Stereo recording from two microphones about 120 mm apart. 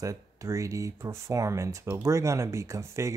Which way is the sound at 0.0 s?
25° right (ahead or behind).